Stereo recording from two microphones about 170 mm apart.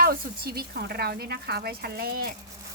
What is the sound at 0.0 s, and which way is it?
Speech, 65° right (ahead or behind).